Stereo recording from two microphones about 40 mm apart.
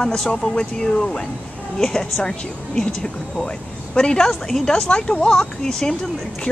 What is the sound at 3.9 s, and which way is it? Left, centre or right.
Speech, centre.